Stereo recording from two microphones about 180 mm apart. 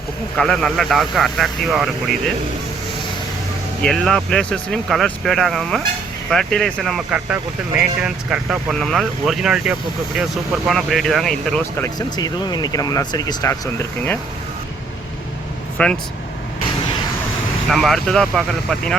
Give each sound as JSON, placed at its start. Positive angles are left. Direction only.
{"t": 0.3, "sound": "speech", "side_deg": 0}
{"t": 3.8, "sound": "speech", "side_deg": 5}
{"t": 11.8, "sound": "speech", "side_deg": 20}
{"t": 15.8, "sound": "speech", "side_deg": 5}
{"t": 17.7, "sound": "speech", "side_deg": 0}